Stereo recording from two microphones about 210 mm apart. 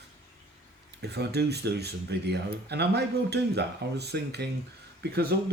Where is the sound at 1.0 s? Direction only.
50° right (ahead or behind).